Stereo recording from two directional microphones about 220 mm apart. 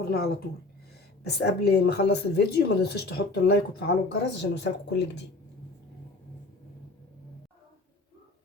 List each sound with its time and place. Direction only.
0.0 s a woman's voice: 45° left (ahead or behind)